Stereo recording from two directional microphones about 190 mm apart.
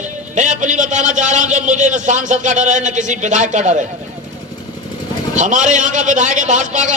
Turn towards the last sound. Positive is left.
turn(degrees=-40)  # may be behind; listen again after turning